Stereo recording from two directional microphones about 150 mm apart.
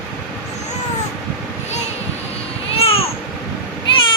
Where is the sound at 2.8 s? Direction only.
40° left (ahead or behind).